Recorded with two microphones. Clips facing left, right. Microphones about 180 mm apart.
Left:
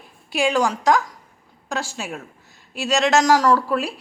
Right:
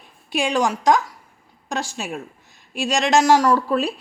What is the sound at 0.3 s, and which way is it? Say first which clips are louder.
A woman's voice: left 1 dB; 20° right (ahead or behind).